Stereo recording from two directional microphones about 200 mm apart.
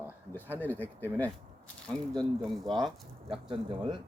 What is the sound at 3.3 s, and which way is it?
Speech, 25° right (ahead or behind).